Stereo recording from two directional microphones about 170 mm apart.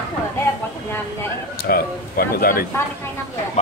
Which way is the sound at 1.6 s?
65° left (ahead or behind).